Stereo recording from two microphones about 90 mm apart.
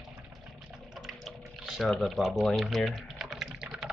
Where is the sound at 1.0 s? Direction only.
Centre (ahead or behind).